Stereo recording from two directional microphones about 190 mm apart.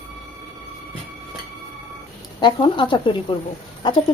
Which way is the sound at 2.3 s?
25° left (ahead or behind).